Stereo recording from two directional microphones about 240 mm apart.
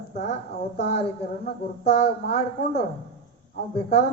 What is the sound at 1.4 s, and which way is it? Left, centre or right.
Speech, left.